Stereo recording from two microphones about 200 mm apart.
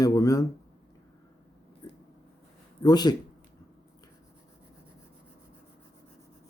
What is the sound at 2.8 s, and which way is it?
Speech, 20° left (ahead or behind).